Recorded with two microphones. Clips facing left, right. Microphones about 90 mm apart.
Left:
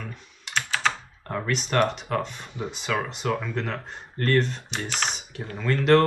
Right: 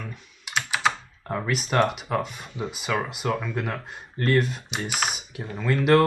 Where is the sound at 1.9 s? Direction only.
5° right (ahead or behind).